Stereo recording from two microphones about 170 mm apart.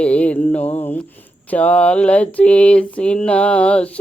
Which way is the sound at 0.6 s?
35° left (ahead or behind).